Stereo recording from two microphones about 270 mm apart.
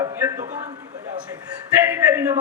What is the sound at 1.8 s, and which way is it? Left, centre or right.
Speech, centre.